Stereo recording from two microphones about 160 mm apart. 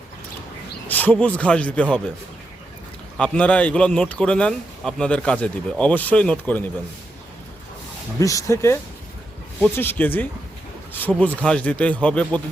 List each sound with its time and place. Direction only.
0.9 s a man's voice: 10° left (ahead or behind)
3.2 s a man's voice: 5° left (ahead or behind)
8.2 s a man's voice: 20° left (ahead or behind)